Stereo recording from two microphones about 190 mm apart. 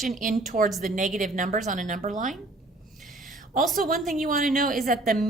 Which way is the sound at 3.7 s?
45° right (ahead or behind).